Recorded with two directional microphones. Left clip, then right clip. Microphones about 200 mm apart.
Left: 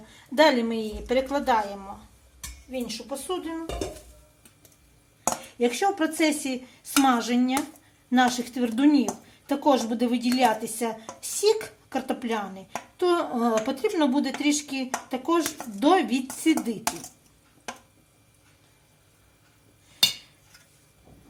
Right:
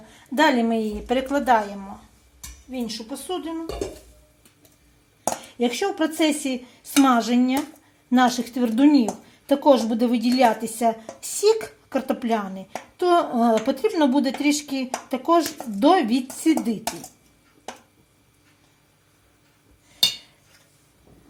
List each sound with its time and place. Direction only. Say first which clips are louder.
0.3 s speech: right 1 dB; 30° right (ahead or behind)
5.5 s speech: even; 35° right (ahead or behind)